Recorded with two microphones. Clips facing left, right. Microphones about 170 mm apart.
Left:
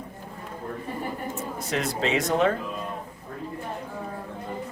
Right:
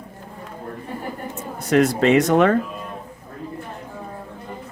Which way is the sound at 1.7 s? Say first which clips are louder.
Right 11 dB; 60° right (ahead or behind).